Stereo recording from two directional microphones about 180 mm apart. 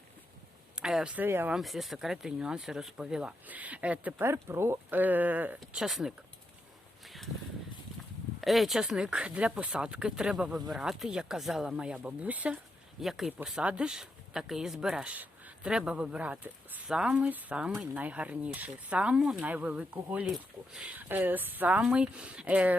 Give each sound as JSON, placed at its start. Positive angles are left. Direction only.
{"t": 0.8, "sound": "speech", "side_deg": -5}
{"t": 7.0, "sound": "a sound", "side_deg": 0}
{"t": 8.4, "sound": "speech", "side_deg": 0}